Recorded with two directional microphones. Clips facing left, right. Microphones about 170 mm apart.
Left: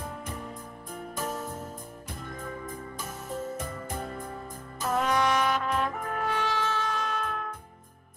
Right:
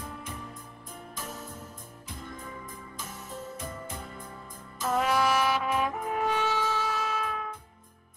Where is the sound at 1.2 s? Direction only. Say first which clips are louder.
Left 8 dB; 50° left (ahead or behind).